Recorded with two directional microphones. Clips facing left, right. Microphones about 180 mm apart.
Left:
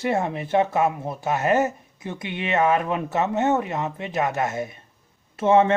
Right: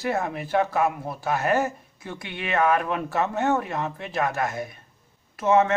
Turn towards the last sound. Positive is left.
turn(degrees=30)  # may be behind; listen again after turning